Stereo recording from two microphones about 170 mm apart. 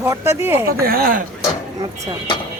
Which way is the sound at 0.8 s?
60° right (ahead or behind).